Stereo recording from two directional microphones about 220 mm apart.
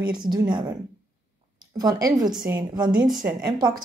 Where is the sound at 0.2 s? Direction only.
20° right (ahead or behind).